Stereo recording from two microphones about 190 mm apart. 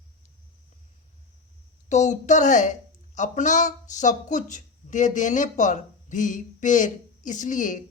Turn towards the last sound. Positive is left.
turn(degrees=45)  # may be behind; listen again after turning